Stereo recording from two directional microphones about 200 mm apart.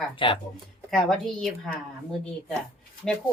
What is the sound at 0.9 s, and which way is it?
Speech, centre (ahead or behind).